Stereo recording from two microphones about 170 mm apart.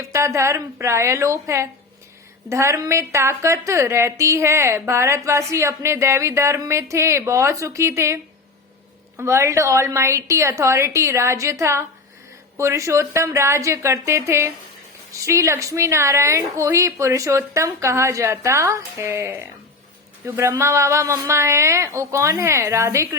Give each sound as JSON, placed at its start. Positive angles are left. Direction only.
{"t": 0.0, "sound": "a woman's voice", "side_deg": -15}